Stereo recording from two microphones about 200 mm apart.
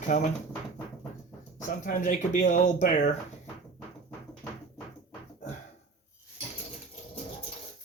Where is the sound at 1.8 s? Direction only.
40° left (ahead or behind).